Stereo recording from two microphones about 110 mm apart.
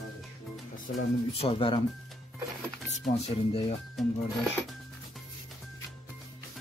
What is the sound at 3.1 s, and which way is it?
Speech, 70° left (ahead or behind).